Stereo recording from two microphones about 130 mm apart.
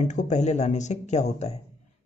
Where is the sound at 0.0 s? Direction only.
65° left (ahead or behind).